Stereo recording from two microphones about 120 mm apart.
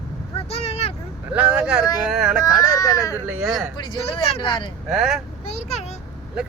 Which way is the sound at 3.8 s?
40° left (ahead or behind).